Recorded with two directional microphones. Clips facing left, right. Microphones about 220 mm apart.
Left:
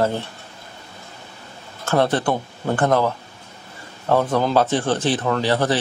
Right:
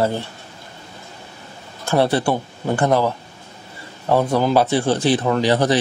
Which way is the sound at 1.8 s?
10° right (ahead or behind).